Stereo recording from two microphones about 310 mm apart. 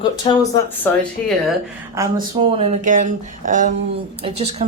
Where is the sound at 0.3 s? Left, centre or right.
Centre.